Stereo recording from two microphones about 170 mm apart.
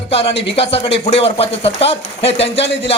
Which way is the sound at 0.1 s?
35° left (ahead or behind).